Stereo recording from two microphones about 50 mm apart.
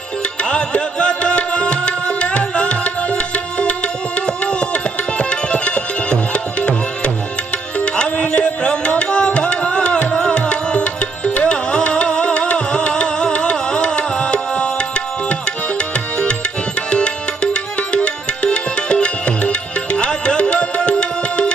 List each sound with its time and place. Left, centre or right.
0.4 s music: centre
7.8 s tabla: left
16.9 s music: left